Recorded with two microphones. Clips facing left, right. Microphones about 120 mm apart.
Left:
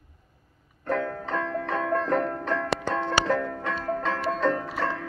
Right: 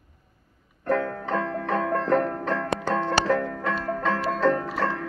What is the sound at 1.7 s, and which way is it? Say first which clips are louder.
Music: right 3 dB; 35° right (ahead or behind).